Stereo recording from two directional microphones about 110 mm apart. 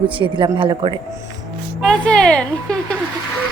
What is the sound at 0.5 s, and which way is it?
Speech, 50° right (ahead or behind).